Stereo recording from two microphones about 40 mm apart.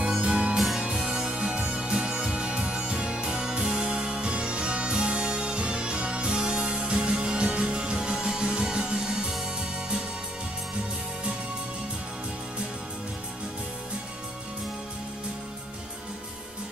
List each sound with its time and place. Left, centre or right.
0.0 s music: right
0.6 s music: centre; by 9.3 s right